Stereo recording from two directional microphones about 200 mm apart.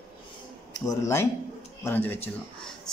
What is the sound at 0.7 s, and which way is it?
A woman's voice, 15° left (ahead or behind).